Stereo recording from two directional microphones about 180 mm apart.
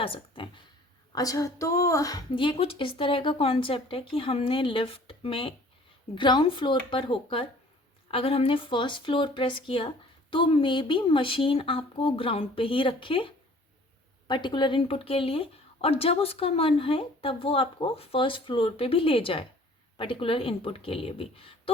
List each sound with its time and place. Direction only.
0.0 s speech: 30° left (ahead or behind)